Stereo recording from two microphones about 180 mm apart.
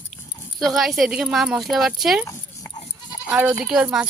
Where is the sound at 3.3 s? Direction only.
5° right (ahead or behind).